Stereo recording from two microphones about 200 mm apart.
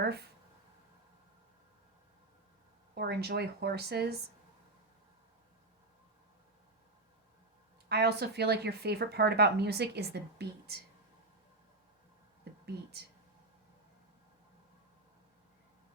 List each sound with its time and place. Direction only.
0.0 s speech: 55° right (ahead or behind)
2.9 s speech: 55° right (ahead or behind)
7.9 s speech: 55° right (ahead or behind)